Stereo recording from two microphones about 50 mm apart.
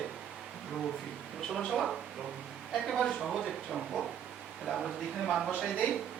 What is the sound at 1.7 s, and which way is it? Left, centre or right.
Speech, centre.